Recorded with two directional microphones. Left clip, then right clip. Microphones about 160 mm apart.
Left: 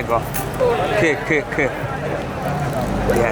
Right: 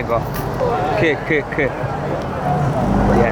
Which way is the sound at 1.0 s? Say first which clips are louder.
Right 1 dB; centre (ahead or behind).